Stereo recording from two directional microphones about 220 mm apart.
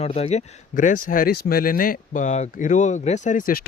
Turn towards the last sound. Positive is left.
turn(degrees=40)  # may be behind; listen again after turning